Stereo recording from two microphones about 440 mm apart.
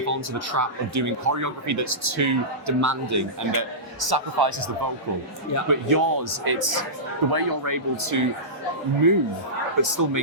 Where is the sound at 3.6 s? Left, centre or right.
Right.